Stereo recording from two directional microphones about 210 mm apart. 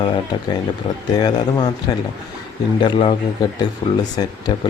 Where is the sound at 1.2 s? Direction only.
20° left (ahead or behind).